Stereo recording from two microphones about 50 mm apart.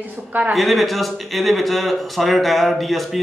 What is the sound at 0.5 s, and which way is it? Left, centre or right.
Speech, centre.